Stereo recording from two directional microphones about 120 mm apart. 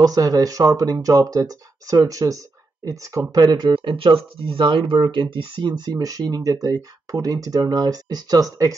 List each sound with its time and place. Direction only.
0.0 s speech: 30° right (ahead or behind)